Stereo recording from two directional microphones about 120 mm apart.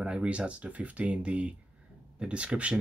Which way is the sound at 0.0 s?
10° right (ahead or behind).